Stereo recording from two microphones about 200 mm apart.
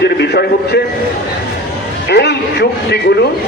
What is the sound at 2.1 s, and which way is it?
Speech, 55° left (ahead or behind).